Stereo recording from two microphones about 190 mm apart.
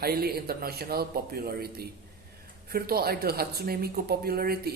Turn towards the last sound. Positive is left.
turn(degrees=-55)  # may be behind; listen again after turning